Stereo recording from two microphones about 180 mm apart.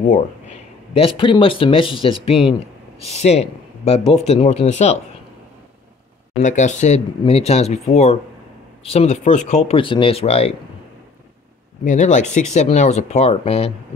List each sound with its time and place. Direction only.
0.0 s a sound: 45° left (ahead or behind)
1.0 s speech: 30° left (ahead or behind)
6.3 s speech: 40° left (ahead or behind)
11.8 s speech: 45° left (ahead or behind)